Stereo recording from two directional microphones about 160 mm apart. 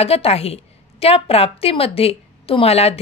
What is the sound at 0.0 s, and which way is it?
A woman's voice, 40° left (ahead or behind).